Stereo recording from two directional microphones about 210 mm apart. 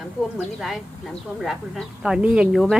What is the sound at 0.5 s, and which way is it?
Speech, centre (ahead or behind).